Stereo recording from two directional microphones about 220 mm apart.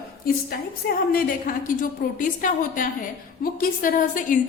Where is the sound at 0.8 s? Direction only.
45° left (ahead or behind).